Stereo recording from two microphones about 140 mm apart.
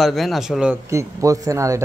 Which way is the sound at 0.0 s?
Centre (ahead or behind).